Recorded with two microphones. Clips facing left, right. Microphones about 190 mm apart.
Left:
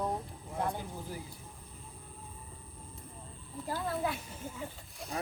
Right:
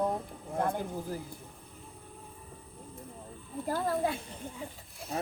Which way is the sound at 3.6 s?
50° right (ahead or behind).